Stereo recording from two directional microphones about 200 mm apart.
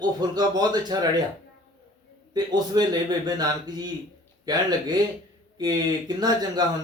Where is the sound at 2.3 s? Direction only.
20° right (ahead or behind).